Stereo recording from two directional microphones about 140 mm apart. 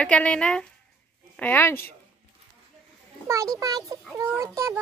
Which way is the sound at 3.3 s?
25° right (ahead or behind).